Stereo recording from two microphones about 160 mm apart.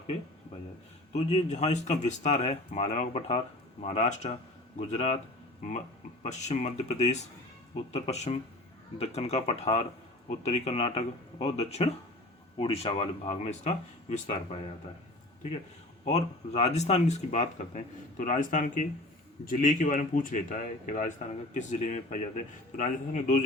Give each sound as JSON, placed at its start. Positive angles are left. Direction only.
{"t": 1.1, "sound": "speech", "side_deg": 45}
{"t": 6.2, "sound": "speech", "side_deg": 45}
{"t": 16.0, "sound": "speech", "side_deg": 40}